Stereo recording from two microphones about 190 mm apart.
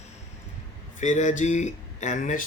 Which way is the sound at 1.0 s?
40° left (ahead or behind).